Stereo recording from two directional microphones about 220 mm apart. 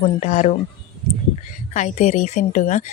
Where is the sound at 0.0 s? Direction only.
30° left (ahead or behind).